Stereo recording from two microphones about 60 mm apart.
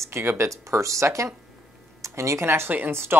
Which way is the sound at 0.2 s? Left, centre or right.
Right.